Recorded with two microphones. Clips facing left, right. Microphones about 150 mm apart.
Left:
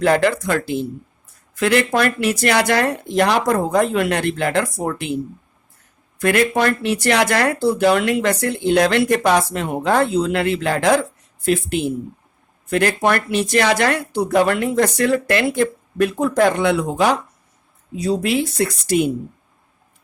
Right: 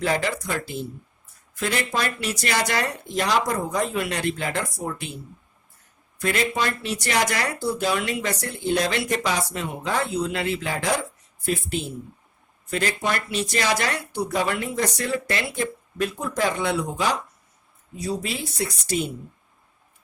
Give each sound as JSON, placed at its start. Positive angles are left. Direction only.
{"t": 0.0, "sound": "speech", "side_deg": 60}
{"t": 6.1, "sound": "speech", "side_deg": 60}